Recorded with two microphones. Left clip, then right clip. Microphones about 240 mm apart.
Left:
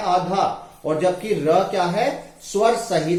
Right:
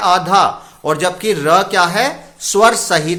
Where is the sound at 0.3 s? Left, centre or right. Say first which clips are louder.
Right 13 dB; right.